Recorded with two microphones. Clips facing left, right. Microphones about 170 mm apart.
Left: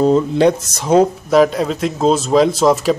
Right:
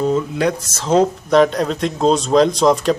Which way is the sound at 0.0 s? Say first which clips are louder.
Left 5 dB; 30° left (ahead or behind).